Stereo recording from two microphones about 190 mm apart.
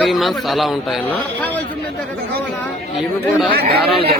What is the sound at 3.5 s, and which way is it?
Speech, 55° right (ahead or behind).